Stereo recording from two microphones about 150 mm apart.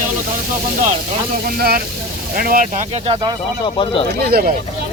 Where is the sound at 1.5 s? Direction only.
90° right.